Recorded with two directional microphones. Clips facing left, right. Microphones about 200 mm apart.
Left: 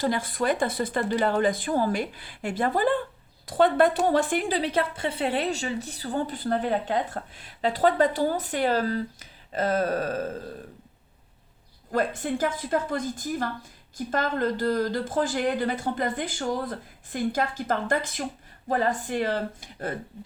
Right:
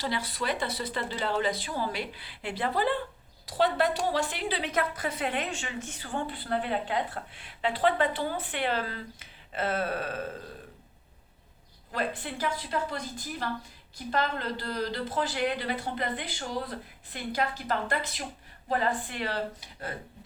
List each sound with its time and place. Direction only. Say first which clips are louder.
0.0 s a woman's voice: left 6 dB; 50° left (ahead or behind)
4.7 s a woman's voice: left 3 dB; 30° left (ahead or behind)
11.9 s a woman's voice: left 7 dB; 45° left (ahead or behind)